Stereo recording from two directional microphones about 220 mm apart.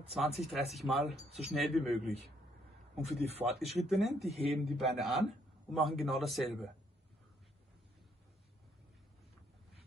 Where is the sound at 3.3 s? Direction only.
30° right (ahead or behind).